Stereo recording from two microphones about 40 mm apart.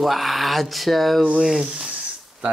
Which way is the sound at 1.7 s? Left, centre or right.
Right.